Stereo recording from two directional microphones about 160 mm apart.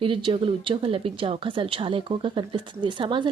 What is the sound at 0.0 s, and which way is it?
A woman's voice, 30° right (ahead or behind).